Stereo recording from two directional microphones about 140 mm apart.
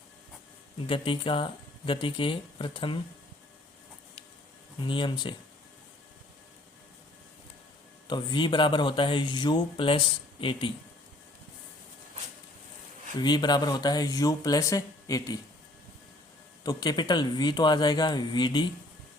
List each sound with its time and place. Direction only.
0.9 s speech: 35° left (ahead or behind)
4.8 s speech: 35° left (ahead or behind)
8.0 s speech: 35° left (ahead or behind)
13.1 s speech: 30° left (ahead or behind)
16.6 s speech: 30° left (ahead or behind)